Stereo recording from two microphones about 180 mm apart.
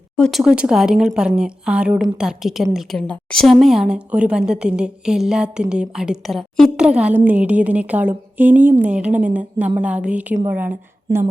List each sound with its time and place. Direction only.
0.2 s a woman's voice: centre (ahead or behind)